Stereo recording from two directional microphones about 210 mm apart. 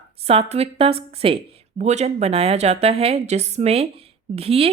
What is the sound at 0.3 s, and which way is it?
Speech, 30° right (ahead or behind).